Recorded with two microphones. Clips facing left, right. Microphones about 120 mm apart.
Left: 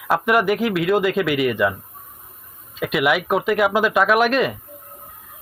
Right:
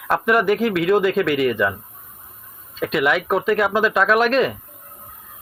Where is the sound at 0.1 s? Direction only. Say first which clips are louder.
Even; 5° left (ahead or behind).